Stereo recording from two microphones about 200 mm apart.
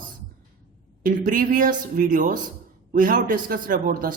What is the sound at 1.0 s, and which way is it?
A man's voice, 40° right (ahead or behind).